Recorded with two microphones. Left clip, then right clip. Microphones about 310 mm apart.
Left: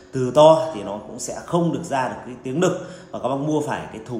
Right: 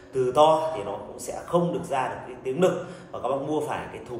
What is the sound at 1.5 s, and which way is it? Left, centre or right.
Speech, left.